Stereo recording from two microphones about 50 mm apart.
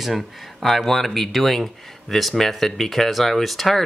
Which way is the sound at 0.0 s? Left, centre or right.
Centre.